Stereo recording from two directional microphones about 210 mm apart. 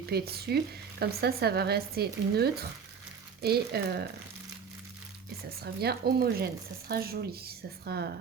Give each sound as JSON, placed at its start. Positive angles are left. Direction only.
{"t": 0.1, "sound": "speech", "side_deg": -50}
{"t": 5.6, "sound": "speech", "side_deg": -50}